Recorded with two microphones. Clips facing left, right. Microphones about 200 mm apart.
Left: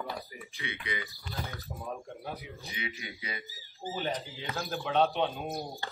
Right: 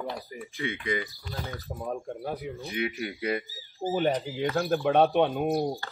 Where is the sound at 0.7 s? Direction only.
45° right (ahead or behind).